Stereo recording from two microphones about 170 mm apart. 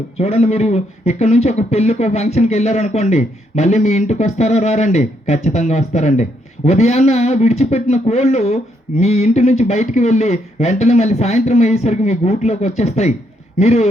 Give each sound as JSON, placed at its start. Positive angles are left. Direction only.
{"t": 0.2, "sound": "a man's voice", "side_deg": 40}